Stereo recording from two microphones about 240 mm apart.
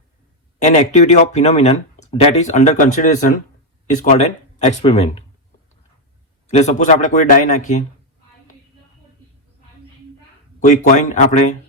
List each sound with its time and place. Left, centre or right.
0.6 s speech: left
6.5 s a man's voice: left
10.6 s a man's voice: left